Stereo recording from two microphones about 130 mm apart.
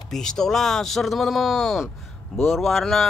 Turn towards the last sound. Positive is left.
turn(degrees=0)  # may be behind; listen again after turning